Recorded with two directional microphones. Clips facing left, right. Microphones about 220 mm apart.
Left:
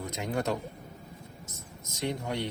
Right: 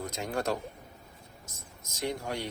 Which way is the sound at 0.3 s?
20° left (ahead or behind).